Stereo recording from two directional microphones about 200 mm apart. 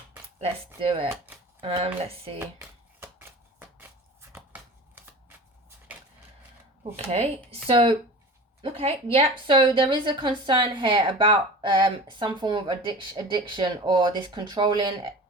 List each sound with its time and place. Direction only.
0.3 s speech: 30° right (ahead or behind)
2.6 s shuffling cards: 10° right (ahead or behind)
4.3 s scissors: 10° right (ahead or behind)
5.9 s a sound: 10° right (ahead or behind)
7.0 s speech: 30° right (ahead or behind)